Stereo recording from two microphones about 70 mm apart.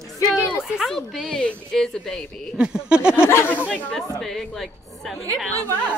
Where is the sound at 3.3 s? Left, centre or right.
Left.